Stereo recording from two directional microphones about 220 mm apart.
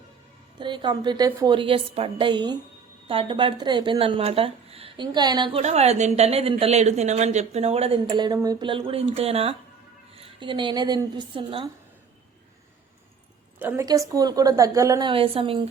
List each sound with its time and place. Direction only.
0.6 s speech: 20° right (ahead or behind)
13.6 s a woman's voice: 10° right (ahead or behind)